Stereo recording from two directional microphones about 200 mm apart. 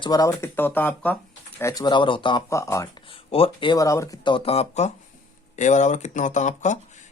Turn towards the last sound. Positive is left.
turn(degrees=35)  # may be behind; listen again after turning